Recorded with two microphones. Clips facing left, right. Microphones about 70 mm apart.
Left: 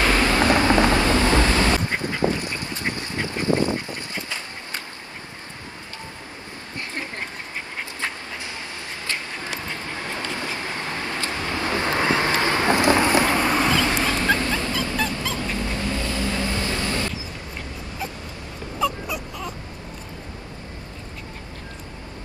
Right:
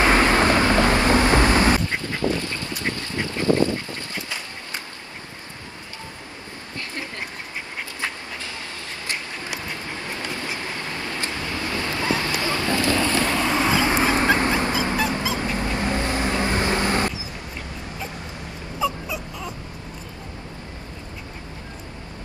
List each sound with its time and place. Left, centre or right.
0.0 s vehicle: right
1.9 s duck: left
9.7 s vehicle: left
13.7 s dog: right
15.0 s dog: centre
15.3 s vehicle: right
18.8 s dog: centre